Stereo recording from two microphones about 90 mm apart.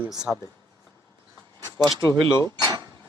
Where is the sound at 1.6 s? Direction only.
45° right (ahead or behind).